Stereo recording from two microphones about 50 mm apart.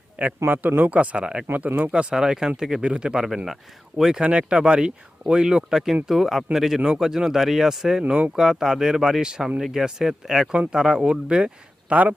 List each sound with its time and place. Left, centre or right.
0.4 s speech: right
0.8 s speech: right; by 2.8 s centre
2.8 s speech: right
3.2 s speech: centre
4.1 s speech: centre
8.0 s speech: right
8.4 s speech: centre
10.5 s speech: right
10.8 s speech: centre
11.0 s speech: right